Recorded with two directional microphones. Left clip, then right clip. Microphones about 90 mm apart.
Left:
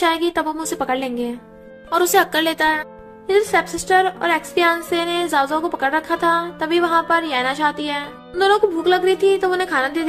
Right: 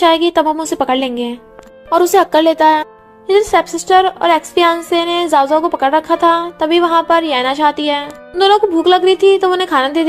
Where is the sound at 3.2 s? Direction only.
50° right (ahead or behind).